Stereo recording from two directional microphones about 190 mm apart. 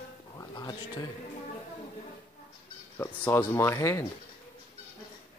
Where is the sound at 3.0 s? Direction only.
10° left (ahead or behind).